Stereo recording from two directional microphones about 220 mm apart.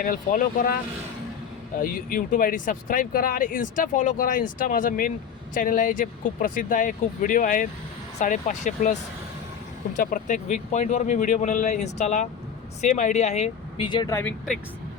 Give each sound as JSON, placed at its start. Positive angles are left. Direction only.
{"t": 0.0, "sound": "speech", "side_deg": 40}
{"t": 1.8, "sound": "speech", "side_deg": 40}
{"t": 10.0, "sound": "speech", "side_deg": 35}